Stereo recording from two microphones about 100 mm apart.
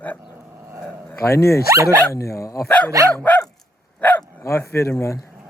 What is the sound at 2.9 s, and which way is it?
Speech, 35° right (ahead or behind).